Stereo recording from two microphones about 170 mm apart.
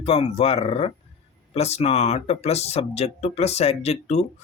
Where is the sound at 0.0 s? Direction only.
35° left (ahead or behind).